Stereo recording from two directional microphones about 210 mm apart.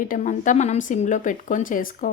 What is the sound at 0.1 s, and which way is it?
A woman's voice, 35° left (ahead or behind).